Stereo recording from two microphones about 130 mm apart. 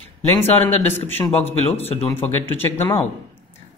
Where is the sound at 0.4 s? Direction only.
15° left (ahead or behind).